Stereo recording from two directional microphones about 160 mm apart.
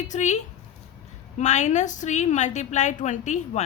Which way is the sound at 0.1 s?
45° left (ahead or behind).